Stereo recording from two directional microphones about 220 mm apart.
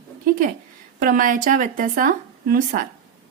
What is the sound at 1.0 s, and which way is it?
Speech, 40° right (ahead or behind).